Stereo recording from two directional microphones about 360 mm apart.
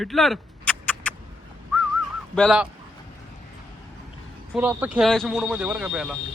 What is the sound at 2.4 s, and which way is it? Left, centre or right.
Speech, centre.